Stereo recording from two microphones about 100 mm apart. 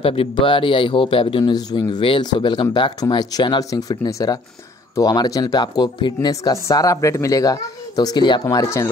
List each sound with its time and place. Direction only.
0.0 s a man's voice: 70° left (ahead or behind)
1.5 s speech: 45° left (ahead or behind); by 8.9 s 30° left (ahead or behind)